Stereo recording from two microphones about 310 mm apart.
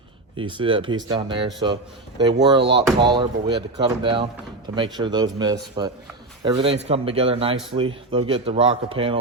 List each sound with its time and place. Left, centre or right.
0.3 s a man's voice: centre